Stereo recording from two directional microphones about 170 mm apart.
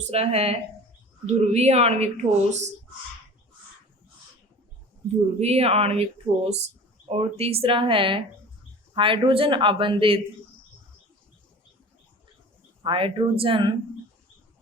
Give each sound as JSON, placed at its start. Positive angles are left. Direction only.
{"t": 0.0, "sound": "speech", "side_deg": -35}
{"t": 5.4, "sound": "speech", "side_deg": -35}
{"t": 12.8, "sound": "speech", "side_deg": -30}